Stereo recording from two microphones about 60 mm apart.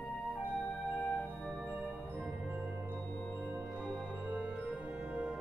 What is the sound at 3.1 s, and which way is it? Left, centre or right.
Music, left.